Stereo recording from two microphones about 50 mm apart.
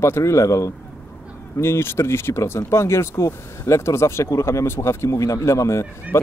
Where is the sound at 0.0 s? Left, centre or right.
Left.